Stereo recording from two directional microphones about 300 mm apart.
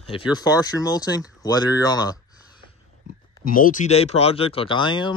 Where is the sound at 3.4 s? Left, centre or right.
Left.